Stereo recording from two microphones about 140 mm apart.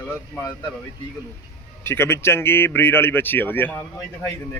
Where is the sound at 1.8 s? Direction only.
15° left (ahead or behind).